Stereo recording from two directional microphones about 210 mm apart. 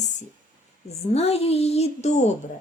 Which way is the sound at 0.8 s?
30° left (ahead or behind).